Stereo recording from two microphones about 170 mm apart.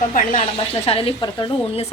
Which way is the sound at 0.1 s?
50° left (ahead or behind).